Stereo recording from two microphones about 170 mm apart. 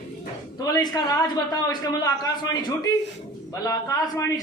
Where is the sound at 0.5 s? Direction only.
20° left (ahead or behind).